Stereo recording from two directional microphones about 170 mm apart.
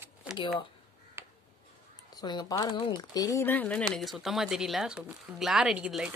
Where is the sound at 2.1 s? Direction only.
25° left (ahead or behind); by 6.1 s 5° right (ahead or behind).